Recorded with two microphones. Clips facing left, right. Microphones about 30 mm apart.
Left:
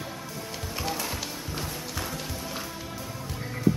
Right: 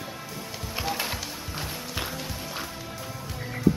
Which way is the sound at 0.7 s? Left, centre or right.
Centre.